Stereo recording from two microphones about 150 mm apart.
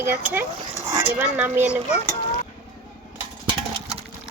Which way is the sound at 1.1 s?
15° right (ahead or behind).